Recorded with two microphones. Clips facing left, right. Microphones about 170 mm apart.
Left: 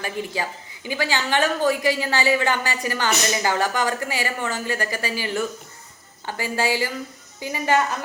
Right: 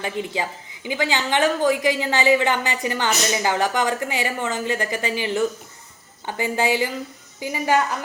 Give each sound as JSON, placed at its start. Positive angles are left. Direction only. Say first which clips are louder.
{"t": 0.0, "sound": "a woman's voice", "louder": "right 2 dB", "side_deg": -20}